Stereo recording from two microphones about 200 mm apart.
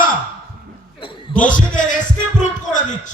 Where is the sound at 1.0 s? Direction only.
25° left (ahead or behind).